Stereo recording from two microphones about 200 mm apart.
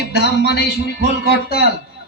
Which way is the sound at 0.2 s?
55° left (ahead or behind).